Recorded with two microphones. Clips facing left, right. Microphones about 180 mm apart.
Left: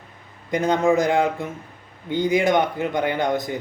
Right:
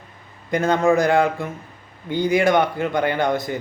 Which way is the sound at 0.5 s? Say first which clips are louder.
Right 1 dB; 15° left (ahead or behind).